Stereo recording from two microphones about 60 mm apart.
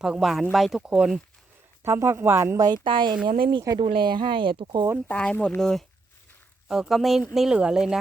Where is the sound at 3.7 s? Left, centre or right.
Right.